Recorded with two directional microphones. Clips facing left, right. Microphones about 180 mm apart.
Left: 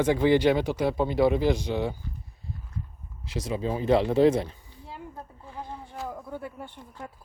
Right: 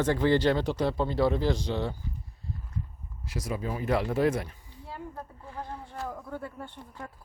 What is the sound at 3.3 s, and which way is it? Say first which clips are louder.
Speech: left 4 dB; 20° left (ahead or behind).